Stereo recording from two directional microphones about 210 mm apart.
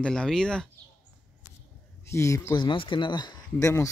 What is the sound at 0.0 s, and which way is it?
Speech, 5° left (ahead or behind).